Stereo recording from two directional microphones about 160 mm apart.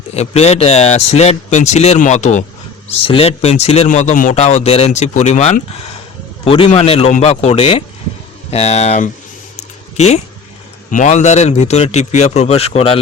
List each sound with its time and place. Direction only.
0.1 s speech: 40° left (ahead or behind)
3.0 s a man's voice: 35° left (ahead or behind)
6.4 s a man's voice: 35° left (ahead or behind)
10.9 s a man's voice: 50° left (ahead or behind)